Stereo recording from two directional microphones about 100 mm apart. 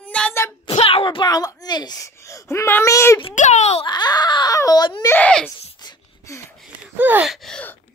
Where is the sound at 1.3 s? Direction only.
40° left (ahead or behind).